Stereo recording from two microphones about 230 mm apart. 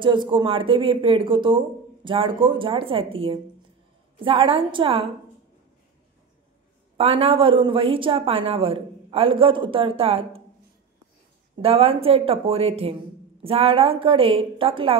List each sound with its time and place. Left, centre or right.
0.0 s a woman's voice: right
7.0 s a woman's voice: right
11.5 s a woman's voice: right